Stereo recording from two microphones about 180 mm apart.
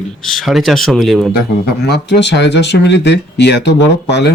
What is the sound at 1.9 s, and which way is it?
Speech, 70° left (ahead or behind).